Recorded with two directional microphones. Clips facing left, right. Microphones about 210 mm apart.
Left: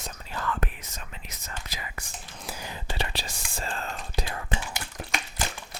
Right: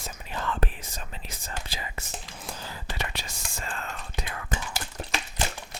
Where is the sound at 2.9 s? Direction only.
30° left (ahead or behind).